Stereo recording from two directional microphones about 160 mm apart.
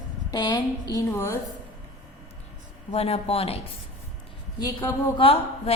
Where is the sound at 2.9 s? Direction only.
40° left (ahead or behind).